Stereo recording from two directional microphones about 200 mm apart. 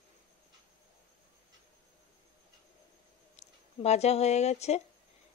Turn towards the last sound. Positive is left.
turn(degrees=35)  # may be behind; listen again after turning